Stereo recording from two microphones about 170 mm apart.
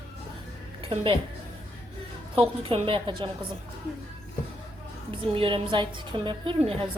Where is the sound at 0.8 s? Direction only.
30° right (ahead or behind).